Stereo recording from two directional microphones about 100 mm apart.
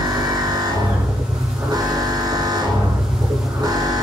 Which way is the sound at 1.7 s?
40° right (ahead or behind).